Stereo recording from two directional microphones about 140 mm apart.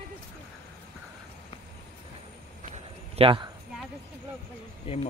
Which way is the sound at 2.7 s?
40° right (ahead or behind).